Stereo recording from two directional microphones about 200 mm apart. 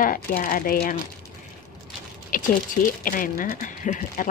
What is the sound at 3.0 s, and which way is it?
Speech, 45° left (ahead or behind).